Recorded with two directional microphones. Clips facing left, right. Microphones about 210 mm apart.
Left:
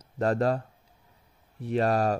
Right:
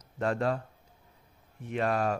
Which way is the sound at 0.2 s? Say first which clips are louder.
Left 4 dB; 40° left (ahead or behind).